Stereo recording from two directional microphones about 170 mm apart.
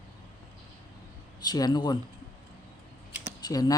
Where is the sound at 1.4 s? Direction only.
25° left (ahead or behind).